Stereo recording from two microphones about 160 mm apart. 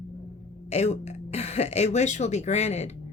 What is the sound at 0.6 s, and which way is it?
Speech, 40° left (ahead or behind).